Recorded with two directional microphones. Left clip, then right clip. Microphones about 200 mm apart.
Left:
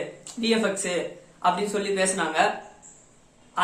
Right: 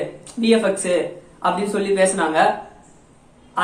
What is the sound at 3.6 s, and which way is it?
Speech, 10° left (ahead or behind).